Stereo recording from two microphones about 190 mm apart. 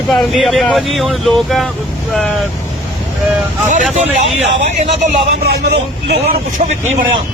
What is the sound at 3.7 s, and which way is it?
Speech, 40° right (ahead or behind).